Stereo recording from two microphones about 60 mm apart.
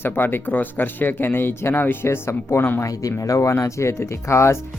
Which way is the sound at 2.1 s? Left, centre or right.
Left.